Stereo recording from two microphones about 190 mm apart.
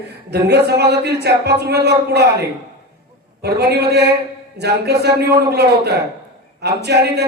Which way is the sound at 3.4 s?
60° right (ahead or behind).